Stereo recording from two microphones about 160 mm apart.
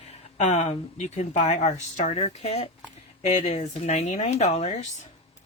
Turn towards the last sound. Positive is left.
turn(degrees=45)  # may be behind; listen again after turning